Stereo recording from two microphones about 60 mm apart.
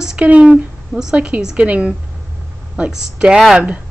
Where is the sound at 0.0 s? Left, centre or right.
Centre.